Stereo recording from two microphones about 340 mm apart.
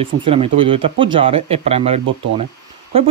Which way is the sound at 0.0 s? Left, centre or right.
Centre.